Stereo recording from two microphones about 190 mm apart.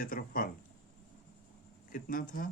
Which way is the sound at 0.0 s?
50° left (ahead or behind).